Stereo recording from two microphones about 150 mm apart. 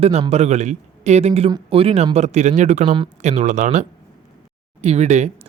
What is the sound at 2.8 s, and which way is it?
Speech, 30° right (ahead or behind).